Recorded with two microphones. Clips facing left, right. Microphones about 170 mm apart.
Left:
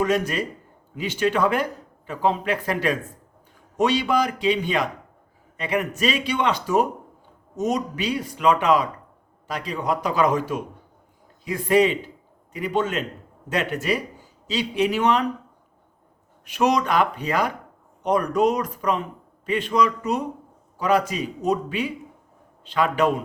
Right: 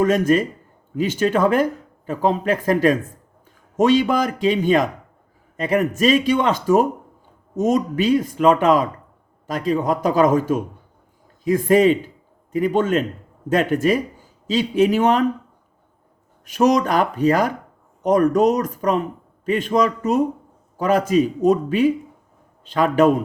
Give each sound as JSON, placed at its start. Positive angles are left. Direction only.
{"t": 0.0, "sound": "a man's voice", "side_deg": -45}
{"t": 16.5, "sound": "speech", "side_deg": -45}